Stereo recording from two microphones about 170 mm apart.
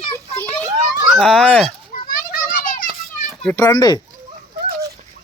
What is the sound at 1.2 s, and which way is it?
Speech, 5° left (ahead or behind).